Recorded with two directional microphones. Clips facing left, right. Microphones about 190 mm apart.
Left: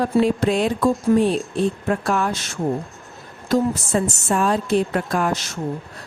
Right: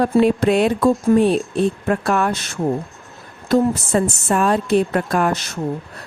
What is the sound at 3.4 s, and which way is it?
A woman's voice, 60° right (ahead or behind).